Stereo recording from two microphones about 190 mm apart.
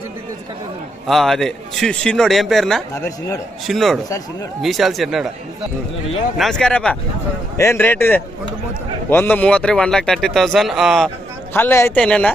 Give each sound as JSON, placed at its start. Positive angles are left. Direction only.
{"t": 1.0, "sound": "speech", "side_deg": 0}
{"t": 2.9, "sound": "a man's voice", "side_deg": 15}
{"t": 3.7, "sound": "speech", "side_deg": 0}
{"t": 6.3, "sound": "a man's voice", "side_deg": 0}
{"t": 11.5, "sound": "a man's voice", "side_deg": 10}